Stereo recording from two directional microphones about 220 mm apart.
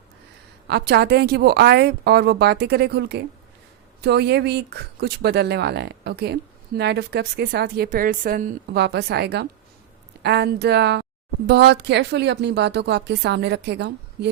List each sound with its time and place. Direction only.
0.7 s speech: 50° right (ahead or behind)